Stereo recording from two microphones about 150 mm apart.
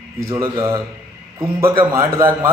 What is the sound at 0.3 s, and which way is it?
Speech, 20° right (ahead or behind).